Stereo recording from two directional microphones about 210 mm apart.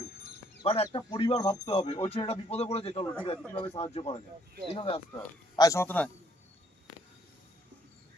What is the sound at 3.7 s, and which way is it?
Speech, 30° left (ahead or behind).